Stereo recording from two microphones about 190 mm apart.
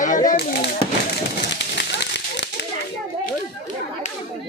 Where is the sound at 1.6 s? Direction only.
65° left (ahead or behind).